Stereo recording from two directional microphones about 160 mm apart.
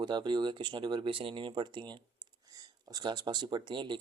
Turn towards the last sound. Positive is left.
turn(degrees=-30)  # may be behind; listen again after turning